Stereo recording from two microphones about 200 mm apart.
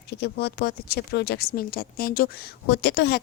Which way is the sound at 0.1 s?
55° left (ahead or behind).